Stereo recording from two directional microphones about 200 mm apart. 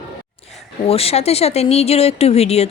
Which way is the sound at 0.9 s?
30° left (ahead or behind).